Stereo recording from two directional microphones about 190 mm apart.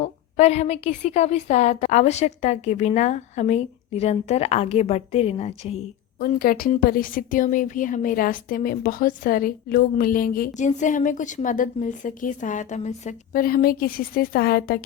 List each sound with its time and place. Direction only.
0.0 s a woman's voice: 35° left (ahead or behind)
6.1 s a woman's voice: 50° left (ahead or behind)